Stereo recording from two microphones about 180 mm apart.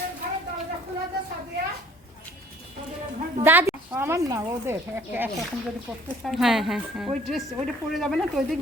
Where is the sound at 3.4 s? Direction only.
10° right (ahead or behind).